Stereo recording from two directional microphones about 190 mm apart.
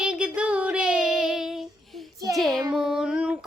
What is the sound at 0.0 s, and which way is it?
Child singing, 5° right (ahead or behind).